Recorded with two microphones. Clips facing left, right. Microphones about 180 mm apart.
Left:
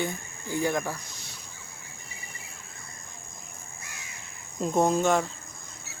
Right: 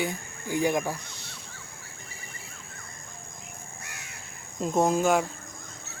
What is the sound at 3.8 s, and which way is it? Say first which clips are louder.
Crow: right 1 dB; 65° right (ahead or behind).